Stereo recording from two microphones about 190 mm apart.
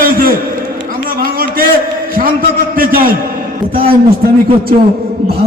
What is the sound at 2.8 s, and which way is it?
Speech, 50° right (ahead or behind).